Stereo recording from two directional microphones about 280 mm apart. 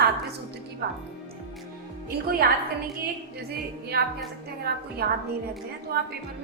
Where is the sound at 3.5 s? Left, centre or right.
Right.